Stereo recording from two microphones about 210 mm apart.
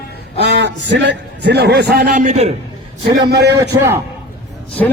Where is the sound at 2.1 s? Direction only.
35° right (ahead or behind).